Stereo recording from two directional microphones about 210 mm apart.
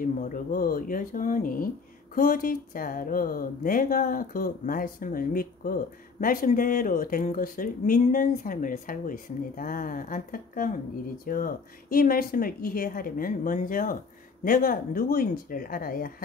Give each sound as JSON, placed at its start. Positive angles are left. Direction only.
{"t": 0.0, "sound": "speech", "side_deg": 40}